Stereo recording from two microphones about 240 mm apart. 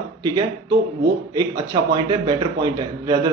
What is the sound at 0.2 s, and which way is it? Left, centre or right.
A man's voice, centre.